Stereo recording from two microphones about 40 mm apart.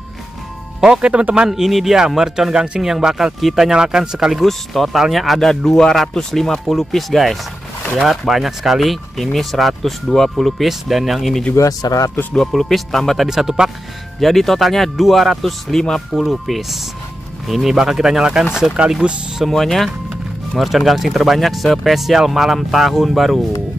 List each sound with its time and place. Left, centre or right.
0.9 s speech: right
1.5 s speech: centre
3.7 s speech: centre
4.4 s speech: centre
5.5 s speech: centre
6.6 s speech: centre
10.7 s speech: centre
13.3 s speech: centre
14.2 s speech: centre
16.2 s speech: centre
19.5 s speech: centre